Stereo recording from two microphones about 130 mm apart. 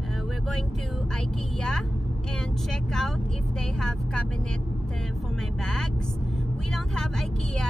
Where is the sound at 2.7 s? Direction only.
5° left (ahead or behind).